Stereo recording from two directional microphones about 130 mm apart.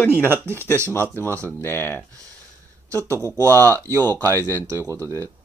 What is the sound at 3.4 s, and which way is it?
Speech, 25° right (ahead or behind).